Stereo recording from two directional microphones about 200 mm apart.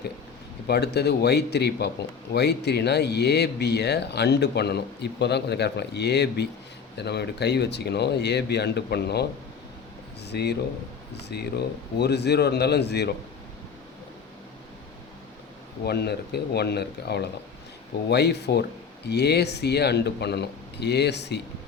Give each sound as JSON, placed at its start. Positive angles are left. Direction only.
{"t": 0.7, "sound": "speech", "side_deg": 55}
{"t": 10.2, "sound": "speech", "side_deg": 55}
{"t": 15.8, "sound": "speech", "side_deg": 55}